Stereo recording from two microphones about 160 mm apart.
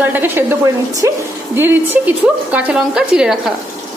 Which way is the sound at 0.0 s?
10° right (ahead or behind).